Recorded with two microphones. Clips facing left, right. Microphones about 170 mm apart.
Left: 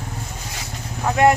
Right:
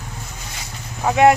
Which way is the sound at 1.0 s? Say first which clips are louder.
Right 2 dB; 5° right (ahead or behind).